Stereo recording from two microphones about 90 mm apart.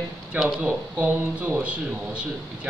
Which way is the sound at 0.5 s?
20° right (ahead or behind).